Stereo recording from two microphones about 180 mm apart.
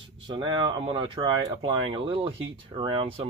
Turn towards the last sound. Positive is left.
turn(degrees=-30)  # may be behind; listen again after turning